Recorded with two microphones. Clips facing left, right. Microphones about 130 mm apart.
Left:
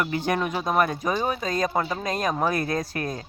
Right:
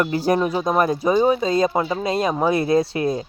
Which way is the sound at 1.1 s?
20° right (ahead or behind).